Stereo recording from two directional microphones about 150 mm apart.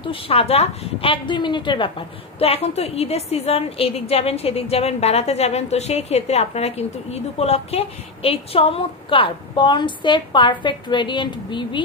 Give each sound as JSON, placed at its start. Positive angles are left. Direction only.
{"t": 0.0, "sound": "a woman's voice", "side_deg": 40}